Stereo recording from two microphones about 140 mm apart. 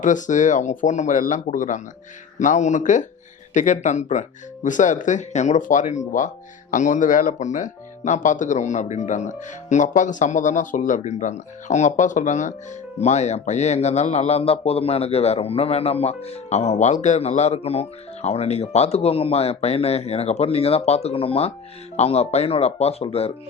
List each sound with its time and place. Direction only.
0.0 s a man's voice: 65° left (ahead or behind); by 23.3 s 45° left (ahead or behind)